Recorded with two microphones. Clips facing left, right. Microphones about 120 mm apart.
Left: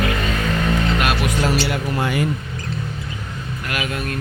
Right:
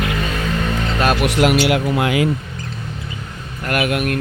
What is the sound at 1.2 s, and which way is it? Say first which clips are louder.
Speech: right 5 dB; 75° right (ahead or behind).